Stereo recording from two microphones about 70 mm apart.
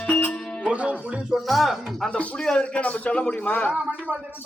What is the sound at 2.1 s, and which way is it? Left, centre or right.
A man's voice, centre.